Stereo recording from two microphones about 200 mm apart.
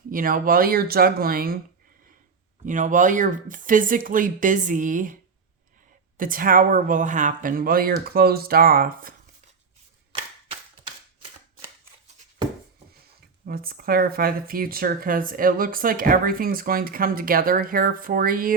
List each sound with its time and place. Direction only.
0.1 s speech: 45° right (ahead or behind)
2.6 s speech: 40° right (ahead or behind)
6.1 s speech: 45° right (ahead or behind)
13.4 s speech: 45° right (ahead or behind)